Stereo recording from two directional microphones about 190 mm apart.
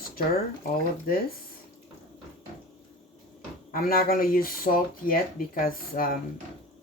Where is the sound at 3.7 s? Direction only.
50° left (ahead or behind).